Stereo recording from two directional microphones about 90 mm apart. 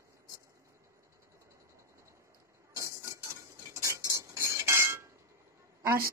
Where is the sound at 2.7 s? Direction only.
35° right (ahead or behind).